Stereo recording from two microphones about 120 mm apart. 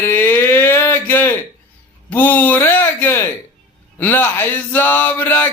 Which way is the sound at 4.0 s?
15° left (ahead or behind).